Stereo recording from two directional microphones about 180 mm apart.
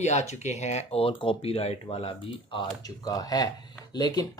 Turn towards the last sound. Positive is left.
turn(degrees=20)  # may be behind; listen again after turning